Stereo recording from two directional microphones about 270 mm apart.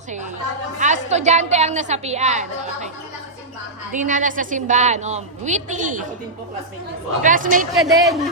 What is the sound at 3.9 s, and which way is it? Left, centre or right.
A woman's voice, right.